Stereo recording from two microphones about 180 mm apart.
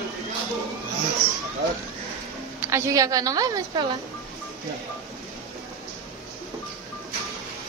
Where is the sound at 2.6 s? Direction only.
15° right (ahead or behind).